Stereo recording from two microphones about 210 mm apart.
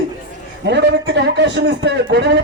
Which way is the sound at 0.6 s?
55° right (ahead or behind).